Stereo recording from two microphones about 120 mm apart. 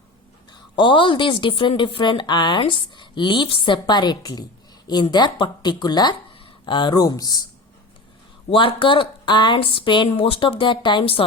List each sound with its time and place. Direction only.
0.5 s a woman's voice: 40° left (ahead or behind)
8.4 s a woman's voice: 45° left (ahead or behind)